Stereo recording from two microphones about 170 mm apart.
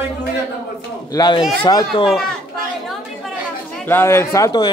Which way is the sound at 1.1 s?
25° left (ahead or behind).